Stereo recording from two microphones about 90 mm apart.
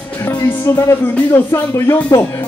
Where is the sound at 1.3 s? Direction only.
30° left (ahead or behind).